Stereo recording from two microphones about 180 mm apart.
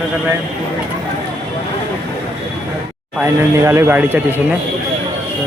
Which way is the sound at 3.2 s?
15° right (ahead or behind).